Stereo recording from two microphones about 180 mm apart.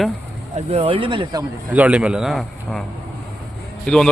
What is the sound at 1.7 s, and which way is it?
A man's voice, 5° right (ahead or behind).